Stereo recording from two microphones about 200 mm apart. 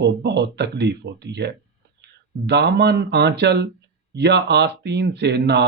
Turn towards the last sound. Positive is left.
turn(degrees=-55)  # may be behind; listen again after turning